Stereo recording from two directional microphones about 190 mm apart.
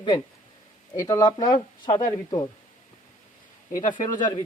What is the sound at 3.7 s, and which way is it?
Speech, 45° left (ahead or behind).